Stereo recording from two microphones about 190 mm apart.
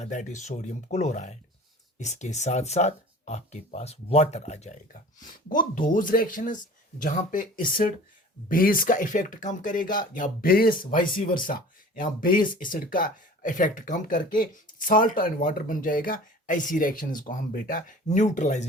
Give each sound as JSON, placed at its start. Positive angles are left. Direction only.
{"t": 0.0, "sound": "speech", "side_deg": 40}